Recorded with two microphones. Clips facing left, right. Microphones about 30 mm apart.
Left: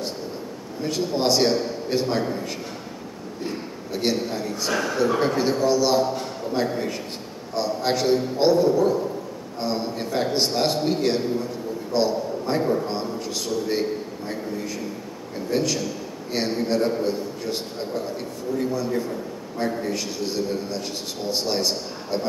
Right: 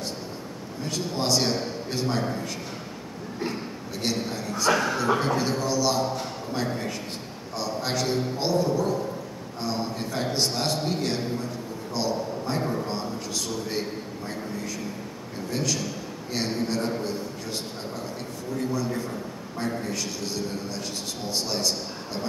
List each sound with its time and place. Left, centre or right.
0.8 s a man's voice: centre
3.9 s a man's voice: centre
4.6 s a man's voice: centre
5.2 s a man's voice: centre
8.4 s music: centre
9.6 s a man's voice: centre
11.9 s a sound: centre
13.7 s a man's voice: centre
18.9 s a man's voice: centre